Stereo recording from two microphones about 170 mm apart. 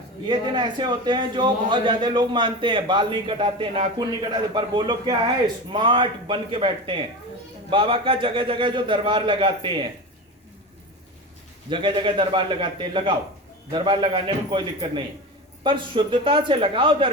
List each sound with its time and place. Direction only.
0.3 s a man's voice: 25° right (ahead or behind)
11.7 s a man's voice: 30° right (ahead or behind)